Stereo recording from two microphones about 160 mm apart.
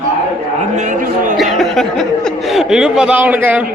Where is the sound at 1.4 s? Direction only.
Centre (ahead or behind).